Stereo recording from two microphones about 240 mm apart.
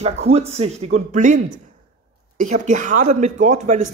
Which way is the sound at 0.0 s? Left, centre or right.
Right.